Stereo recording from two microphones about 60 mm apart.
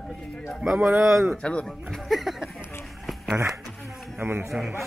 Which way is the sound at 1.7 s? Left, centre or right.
Centre.